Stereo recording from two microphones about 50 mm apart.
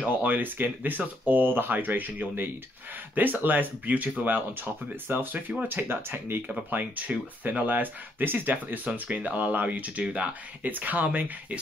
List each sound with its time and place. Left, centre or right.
0.0 s speech: right
6.7 s speech: right